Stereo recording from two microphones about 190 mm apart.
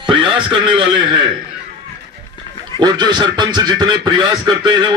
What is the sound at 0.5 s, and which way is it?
Speech, 25° right (ahead or behind).